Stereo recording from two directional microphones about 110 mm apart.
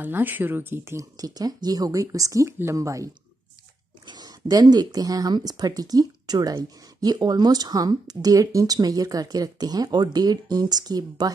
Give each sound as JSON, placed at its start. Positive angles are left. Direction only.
{"t": 0.0, "sound": "speech", "side_deg": -15}
{"t": 1.1, "sound": "speech", "side_deg": -35}
{"t": 4.1, "sound": "speech", "side_deg": -35}